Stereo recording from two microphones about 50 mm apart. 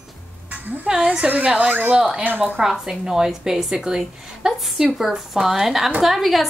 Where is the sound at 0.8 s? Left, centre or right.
Right.